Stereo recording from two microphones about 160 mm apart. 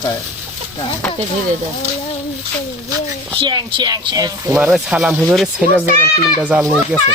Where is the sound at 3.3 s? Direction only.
30° right (ahead or behind).